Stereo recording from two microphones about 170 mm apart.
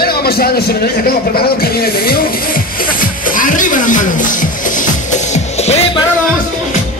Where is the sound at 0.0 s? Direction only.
65° left (ahead or behind).